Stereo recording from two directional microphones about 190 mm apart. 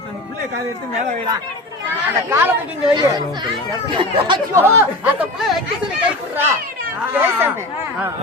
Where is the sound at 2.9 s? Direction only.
20° right (ahead or behind).